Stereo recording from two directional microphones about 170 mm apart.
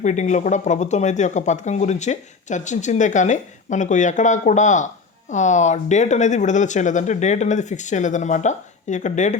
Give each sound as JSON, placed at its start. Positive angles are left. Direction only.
{"t": 0.0, "sound": "speech", "side_deg": 45}